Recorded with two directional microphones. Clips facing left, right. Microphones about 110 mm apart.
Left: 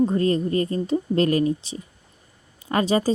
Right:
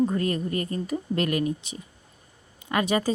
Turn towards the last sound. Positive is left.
turn(degrees=30)  # may be behind; listen again after turning